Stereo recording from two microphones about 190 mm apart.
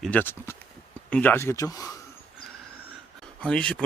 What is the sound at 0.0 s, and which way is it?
Speech, 10° left (ahead or behind).